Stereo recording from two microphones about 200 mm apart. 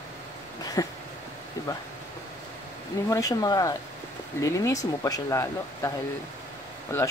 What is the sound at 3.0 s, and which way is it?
Speech, 15° left (ahead or behind).